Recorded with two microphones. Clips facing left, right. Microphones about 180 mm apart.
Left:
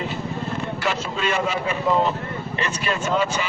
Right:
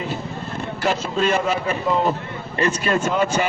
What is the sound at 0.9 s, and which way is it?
A man's voice, 45° right (ahead or behind).